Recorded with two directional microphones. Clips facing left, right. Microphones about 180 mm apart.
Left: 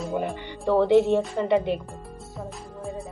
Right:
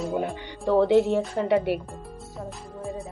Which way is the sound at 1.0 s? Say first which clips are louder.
Left 1 dB; 15° left (ahead or behind).